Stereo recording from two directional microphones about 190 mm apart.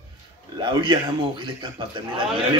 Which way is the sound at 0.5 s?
25° right (ahead or behind).